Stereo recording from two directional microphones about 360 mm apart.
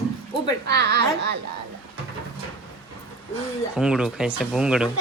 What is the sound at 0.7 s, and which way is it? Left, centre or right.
Speech, right.